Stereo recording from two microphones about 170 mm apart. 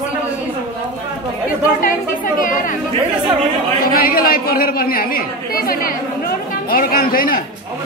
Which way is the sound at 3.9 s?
60° left (ahead or behind).